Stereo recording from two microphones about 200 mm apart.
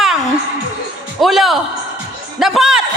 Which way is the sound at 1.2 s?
Centre (ahead or behind).